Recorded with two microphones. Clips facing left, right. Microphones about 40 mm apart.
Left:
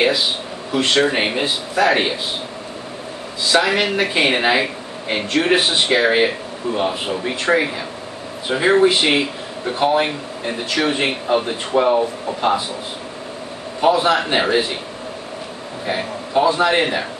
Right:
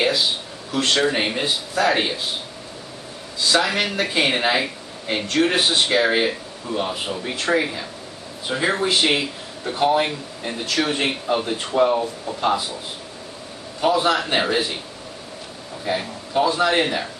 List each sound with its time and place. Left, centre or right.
0.7 s speech: centre
3.5 s speech: centre
13.7 s a man's voice: centre
15.8 s speech: centre